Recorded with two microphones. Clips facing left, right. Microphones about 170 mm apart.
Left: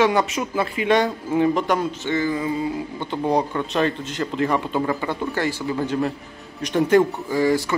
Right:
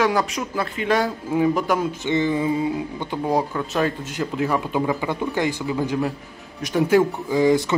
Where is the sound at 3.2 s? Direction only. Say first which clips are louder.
Left 1 dB; 5° right (ahead or behind).